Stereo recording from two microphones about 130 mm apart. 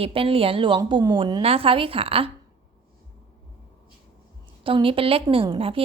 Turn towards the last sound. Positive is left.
turn(degrees=-45)  # may be behind; listen again after turning